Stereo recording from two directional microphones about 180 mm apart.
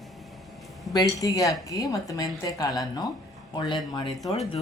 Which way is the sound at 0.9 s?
20° left (ahead or behind).